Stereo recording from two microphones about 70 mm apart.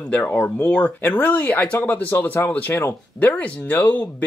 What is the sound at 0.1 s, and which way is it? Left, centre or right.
Speech, left.